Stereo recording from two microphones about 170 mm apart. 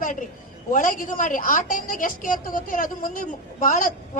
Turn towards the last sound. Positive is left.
turn(degrees=50)  # may be behind; listen again after turning